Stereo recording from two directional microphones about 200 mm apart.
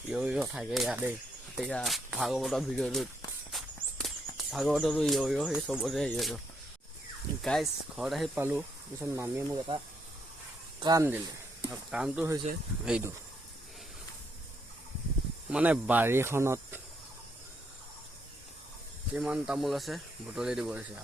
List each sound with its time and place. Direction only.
0.1 s speech: 5° right (ahead or behind)
3.5 s walk: centre (ahead or behind)
4.5 s speech: centre (ahead or behind)
7.4 s speech: centre (ahead or behind)
10.8 s speech: 20° right (ahead or behind)
11.7 s speech: 5° right (ahead or behind)
15.4 s speech: 5° right (ahead or behind)
19.1 s speech: 5° right (ahead or behind)